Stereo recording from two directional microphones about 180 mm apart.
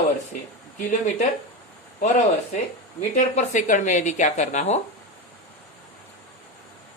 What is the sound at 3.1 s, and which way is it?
Speech, 45° left (ahead or behind).